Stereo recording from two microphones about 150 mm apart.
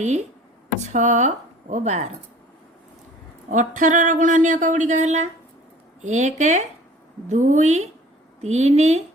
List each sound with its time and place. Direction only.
0.0 s speech: 50° right (ahead or behind)
3.5 s speech: 60° right (ahead or behind)